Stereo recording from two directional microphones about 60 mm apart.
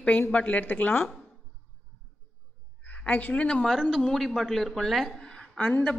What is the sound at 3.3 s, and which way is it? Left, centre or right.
Speech, centre.